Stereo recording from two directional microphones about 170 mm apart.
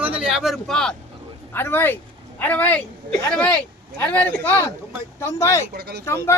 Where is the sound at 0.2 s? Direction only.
5° right (ahead or behind); by 5.6 s 15° left (ahead or behind).